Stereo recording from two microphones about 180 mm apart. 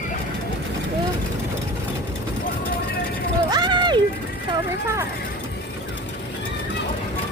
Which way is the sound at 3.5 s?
25° right (ahead or behind).